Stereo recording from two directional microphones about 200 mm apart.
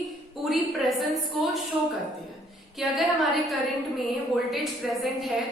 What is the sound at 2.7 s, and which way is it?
A woman's voice, centre (ahead or behind).